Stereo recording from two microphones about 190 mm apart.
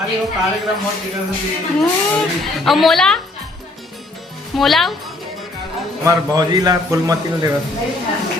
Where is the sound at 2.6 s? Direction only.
Centre (ahead or behind).